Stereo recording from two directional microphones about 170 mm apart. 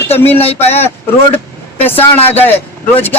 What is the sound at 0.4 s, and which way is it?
Speech, 40° left (ahead or behind).